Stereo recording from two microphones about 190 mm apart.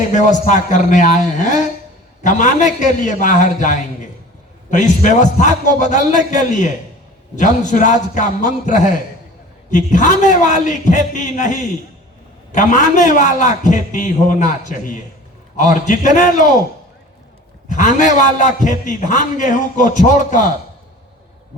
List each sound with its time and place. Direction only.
0.1 s a man's voice: 40° left (ahead or behind)
17.7 s a man's voice: 40° left (ahead or behind)